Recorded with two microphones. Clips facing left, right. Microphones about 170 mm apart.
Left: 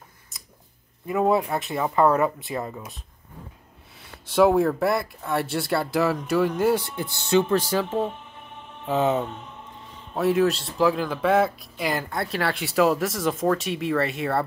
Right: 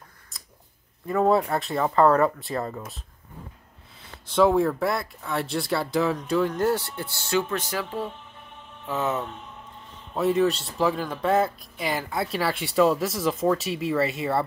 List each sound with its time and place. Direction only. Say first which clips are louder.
1.0 s speech: even; 15° left (ahead or behind)
2.6 s speech: right 1 dB; 5° left (ahead or behind)
4.3 s speech: left 1 dB; 5° left (ahead or behind); by 7.4 s 20° left (ahead or behind)
7.4 s speech: left 7 dB; 30° left (ahead or behind)
10.1 s speech: left 1 dB; centre (ahead or behind)